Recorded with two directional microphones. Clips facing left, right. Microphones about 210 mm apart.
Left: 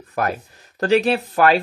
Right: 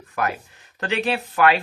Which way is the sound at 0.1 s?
40° left (ahead or behind).